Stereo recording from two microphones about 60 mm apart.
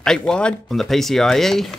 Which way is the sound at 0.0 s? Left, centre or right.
Centre.